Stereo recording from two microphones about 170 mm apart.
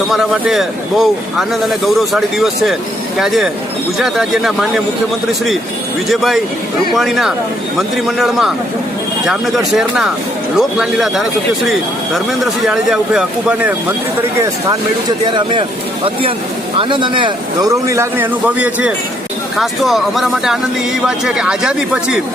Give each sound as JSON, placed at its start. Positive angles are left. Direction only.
{"t": 0.1, "sound": "a man's voice", "side_deg": 0}
{"t": 6.1, "sound": "a man's voice", "side_deg": 0}
{"t": 9.7, "sound": "a man's voice", "side_deg": -5}
{"t": 12.6, "sound": "a man's voice", "side_deg": -5}
{"t": 15.3, "sound": "speech", "side_deg": -30}
{"t": 16.7, "sound": "a man's voice", "side_deg": -30}